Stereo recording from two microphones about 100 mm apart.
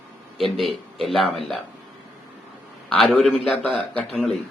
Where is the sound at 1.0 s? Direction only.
Centre (ahead or behind).